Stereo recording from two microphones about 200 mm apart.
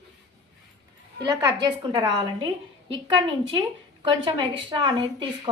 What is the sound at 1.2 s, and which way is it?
A woman's voice, 20° right (ahead or behind).